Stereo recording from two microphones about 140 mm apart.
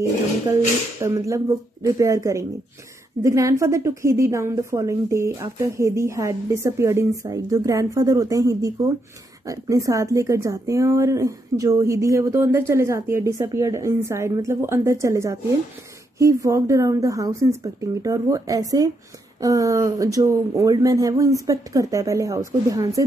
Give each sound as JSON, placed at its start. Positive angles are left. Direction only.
{"t": 1.0, "sound": "speech", "side_deg": -20}